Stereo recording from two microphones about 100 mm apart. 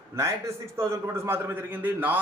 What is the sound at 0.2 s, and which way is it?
A man's voice, 30° right (ahead or behind).